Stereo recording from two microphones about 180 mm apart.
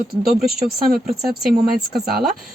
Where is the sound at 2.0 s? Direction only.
60° right (ahead or behind).